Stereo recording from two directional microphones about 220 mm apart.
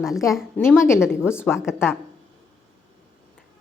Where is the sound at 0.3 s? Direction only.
Centre (ahead or behind).